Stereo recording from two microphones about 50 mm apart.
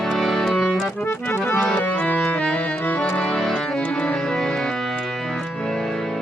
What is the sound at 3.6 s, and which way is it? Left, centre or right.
Music, centre.